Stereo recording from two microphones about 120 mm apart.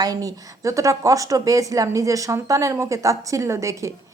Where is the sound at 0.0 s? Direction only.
30° right (ahead or behind).